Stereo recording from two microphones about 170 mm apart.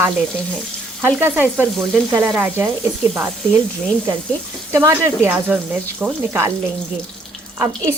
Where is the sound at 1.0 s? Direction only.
10° right (ahead or behind).